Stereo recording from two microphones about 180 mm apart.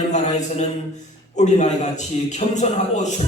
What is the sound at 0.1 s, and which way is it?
A man's voice, 40° left (ahead or behind).